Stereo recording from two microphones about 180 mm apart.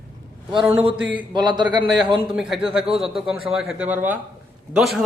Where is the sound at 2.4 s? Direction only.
Centre (ahead or behind).